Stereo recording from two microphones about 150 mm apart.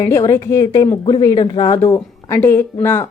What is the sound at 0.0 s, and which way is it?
Speech, 20° left (ahead or behind).